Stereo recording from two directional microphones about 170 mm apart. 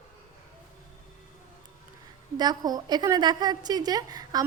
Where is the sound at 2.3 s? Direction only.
25° right (ahead or behind).